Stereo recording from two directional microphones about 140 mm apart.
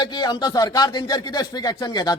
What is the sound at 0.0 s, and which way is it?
A man's voice, 30° left (ahead or behind).